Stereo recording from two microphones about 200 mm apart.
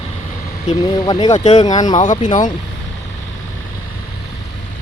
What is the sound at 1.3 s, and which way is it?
Speech, 35° left (ahead or behind).